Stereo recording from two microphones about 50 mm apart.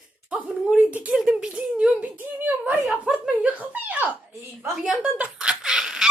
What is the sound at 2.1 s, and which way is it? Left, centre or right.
Speech, right.